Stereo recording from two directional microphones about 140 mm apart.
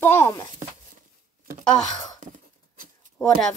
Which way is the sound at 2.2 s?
75° right (ahead or behind).